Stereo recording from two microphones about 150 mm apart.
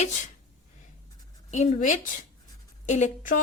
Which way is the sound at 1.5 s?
50° left (ahead or behind).